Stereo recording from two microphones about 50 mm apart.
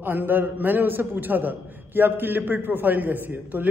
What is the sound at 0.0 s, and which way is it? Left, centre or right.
A man's voice, right.